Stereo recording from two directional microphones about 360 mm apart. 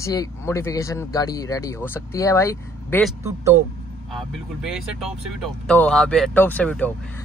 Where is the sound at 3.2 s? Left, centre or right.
Centre.